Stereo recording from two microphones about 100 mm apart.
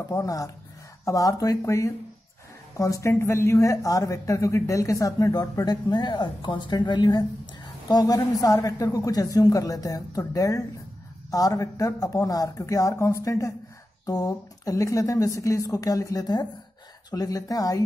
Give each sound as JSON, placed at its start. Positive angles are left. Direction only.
{"t": 0.1, "sound": "speech", "side_deg": 35}